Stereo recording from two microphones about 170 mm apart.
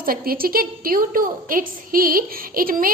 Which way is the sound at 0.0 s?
60° right (ahead or behind).